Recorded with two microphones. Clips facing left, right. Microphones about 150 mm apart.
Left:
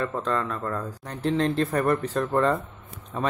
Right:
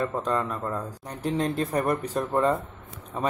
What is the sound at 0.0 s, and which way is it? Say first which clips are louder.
Speech: even; 10° right (ahead or behind).